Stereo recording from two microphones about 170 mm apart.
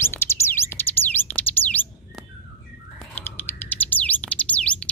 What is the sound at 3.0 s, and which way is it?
Bird, 10° left (ahead or behind).